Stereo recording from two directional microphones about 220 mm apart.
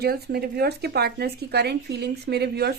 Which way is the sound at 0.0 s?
45° right (ahead or behind).